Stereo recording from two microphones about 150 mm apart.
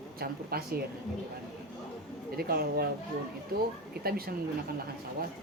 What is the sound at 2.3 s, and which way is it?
Speech, 90° right.